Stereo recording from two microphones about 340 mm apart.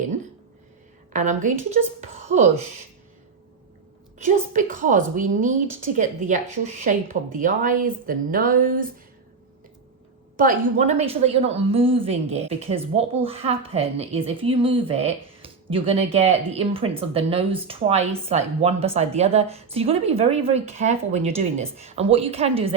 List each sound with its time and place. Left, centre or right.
1.1 s a woman's voice: right
4.2 s a woman's voice: right
10.3 s a woman's voice: right